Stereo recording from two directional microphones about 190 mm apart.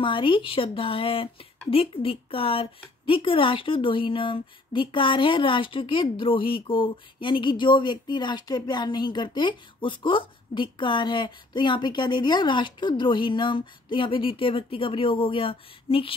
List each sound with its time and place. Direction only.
0.0 s a woman's voice: 25° left (ahead or behind)